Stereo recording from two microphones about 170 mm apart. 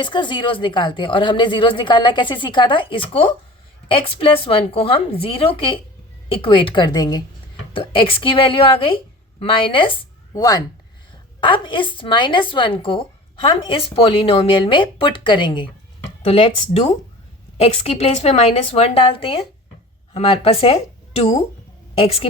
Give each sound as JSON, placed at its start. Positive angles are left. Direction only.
{"t": 0.0, "sound": "a woman's voice", "side_deg": 25}